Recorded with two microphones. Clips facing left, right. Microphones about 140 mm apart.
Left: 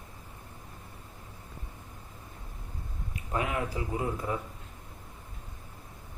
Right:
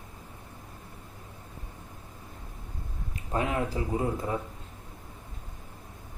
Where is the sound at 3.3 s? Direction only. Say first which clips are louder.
Right 3 dB; 30° right (ahead or behind).